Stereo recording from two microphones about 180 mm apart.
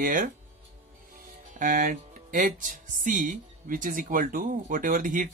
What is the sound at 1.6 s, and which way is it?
Speech, 45° right (ahead or behind).